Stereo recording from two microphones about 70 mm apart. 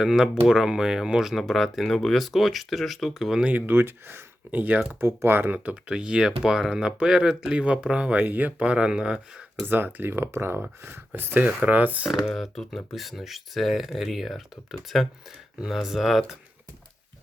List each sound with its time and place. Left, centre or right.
0.0 s speech: centre
3.7 s speech: right
5.7 s speech: centre
9.6 s speech: right
12.0 s speech: centre